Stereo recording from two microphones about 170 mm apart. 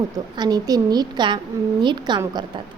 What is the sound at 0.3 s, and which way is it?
A woman's voice, 25° right (ahead or behind).